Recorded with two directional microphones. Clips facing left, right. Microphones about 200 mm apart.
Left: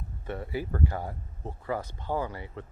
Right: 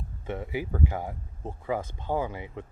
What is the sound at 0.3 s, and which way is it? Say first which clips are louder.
Speech: right 1 dB; 15° right (ahead or behind).